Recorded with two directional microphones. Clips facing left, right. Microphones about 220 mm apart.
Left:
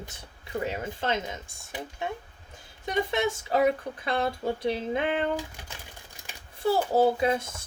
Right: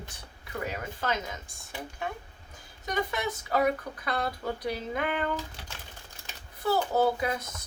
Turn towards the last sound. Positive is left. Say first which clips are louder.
# left 4 dB
turn(degrees=25)  # may be behind; listen again after turning